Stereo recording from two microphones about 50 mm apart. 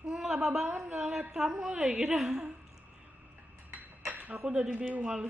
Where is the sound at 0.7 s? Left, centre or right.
Right.